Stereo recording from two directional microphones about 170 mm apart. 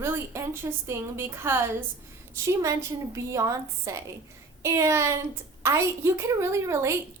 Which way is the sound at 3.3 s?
20° right (ahead or behind).